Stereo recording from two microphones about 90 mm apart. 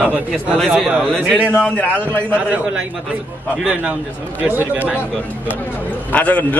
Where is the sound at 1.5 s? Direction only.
15° left (ahead or behind).